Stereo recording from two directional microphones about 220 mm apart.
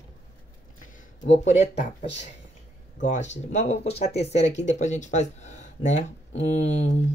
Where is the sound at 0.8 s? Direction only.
35° left (ahead or behind).